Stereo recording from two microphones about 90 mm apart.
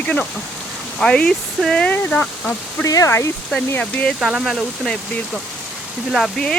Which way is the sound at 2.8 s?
35° left (ahead or behind).